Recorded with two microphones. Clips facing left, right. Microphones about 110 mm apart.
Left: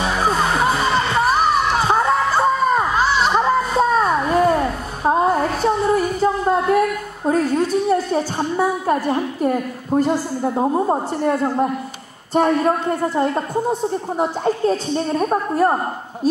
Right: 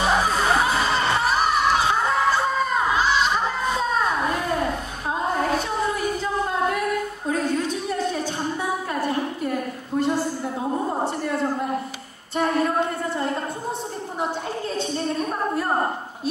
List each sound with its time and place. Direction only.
3.2 s a sound: 40° left (ahead or behind)
5.0 s music: 40° left (ahead or behind)
8.1 s a sound: 45° left (ahead or behind)
10.6 s a man's voice: 50° left (ahead or behind)
12.4 s a man's voice: 45° left (ahead or behind)
15.1 s a man's voice: 40° left (ahead or behind)